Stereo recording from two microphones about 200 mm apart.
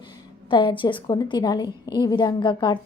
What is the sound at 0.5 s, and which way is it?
A woman's voice, 25° left (ahead or behind).